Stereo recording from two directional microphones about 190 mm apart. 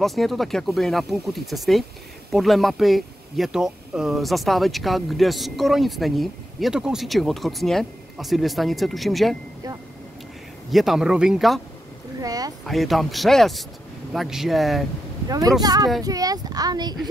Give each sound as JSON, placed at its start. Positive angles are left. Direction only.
{"t": 0.0, "sound": "speech", "side_deg": 0}
{"t": 10.7, "sound": "speech", "side_deg": 0}
{"t": 12.2, "sound": "speech", "side_deg": -20}
{"t": 12.6, "sound": "speech", "side_deg": 0}
{"t": 15.2, "sound": "speech", "side_deg": -20}